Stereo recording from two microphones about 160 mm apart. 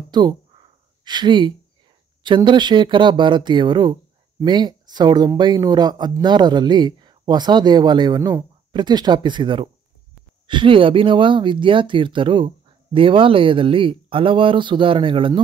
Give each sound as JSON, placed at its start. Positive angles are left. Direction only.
{"t": 0.1, "sound": "speech", "side_deg": -25}